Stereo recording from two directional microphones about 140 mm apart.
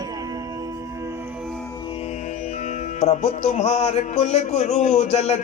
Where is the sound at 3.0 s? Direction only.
50° left (ahead or behind).